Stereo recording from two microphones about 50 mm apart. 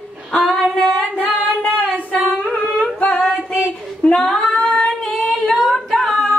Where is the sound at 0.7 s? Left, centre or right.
Left.